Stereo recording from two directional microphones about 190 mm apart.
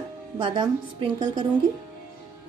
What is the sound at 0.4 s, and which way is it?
A woman's voice, 25° right (ahead or behind).